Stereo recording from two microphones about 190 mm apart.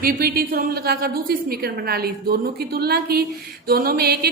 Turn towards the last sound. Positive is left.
turn(degrees=-55)  # may be behind; listen again after turning